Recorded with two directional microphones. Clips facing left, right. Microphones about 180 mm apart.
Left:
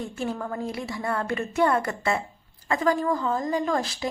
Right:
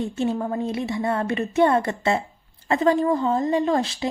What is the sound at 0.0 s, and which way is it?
Speech, 25° right (ahead or behind).